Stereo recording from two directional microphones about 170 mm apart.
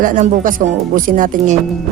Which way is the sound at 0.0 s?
50° right (ahead or behind).